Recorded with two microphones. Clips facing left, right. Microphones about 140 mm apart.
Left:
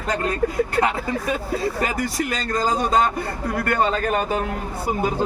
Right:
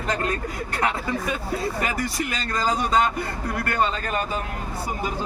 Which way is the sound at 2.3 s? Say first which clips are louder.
Left 3 dB; 45° left (ahead or behind).